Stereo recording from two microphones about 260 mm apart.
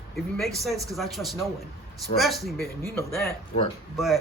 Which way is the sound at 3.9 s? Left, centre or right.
Centre.